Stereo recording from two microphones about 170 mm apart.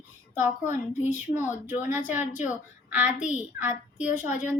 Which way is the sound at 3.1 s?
45° left (ahead or behind).